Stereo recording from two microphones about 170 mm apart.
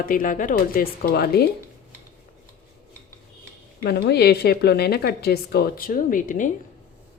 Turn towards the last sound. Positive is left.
turn(degrees=50)  # may be behind; listen again after turning